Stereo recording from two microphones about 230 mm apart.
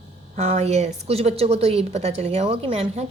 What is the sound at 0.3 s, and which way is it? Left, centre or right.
A woman's voice, right.